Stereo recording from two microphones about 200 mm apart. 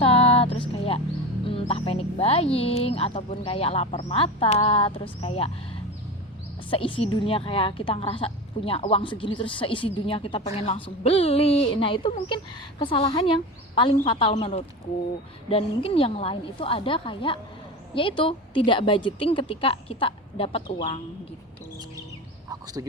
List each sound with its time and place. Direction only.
0.0 s music: 30° left (ahead or behind)
1.5 s speech: 25° left (ahead or behind)
6.7 s speech: 25° left (ahead or behind)
22.4 s speech: 15° right (ahead or behind)